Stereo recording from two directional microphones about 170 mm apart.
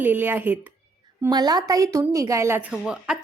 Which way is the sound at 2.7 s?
5° right (ahead or behind).